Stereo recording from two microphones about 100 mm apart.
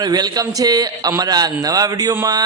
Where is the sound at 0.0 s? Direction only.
40° right (ahead or behind).